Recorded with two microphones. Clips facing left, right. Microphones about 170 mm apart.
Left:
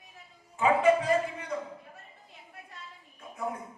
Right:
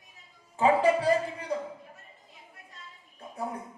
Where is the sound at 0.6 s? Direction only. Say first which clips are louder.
Right 1 dB; 35° right (ahead or behind).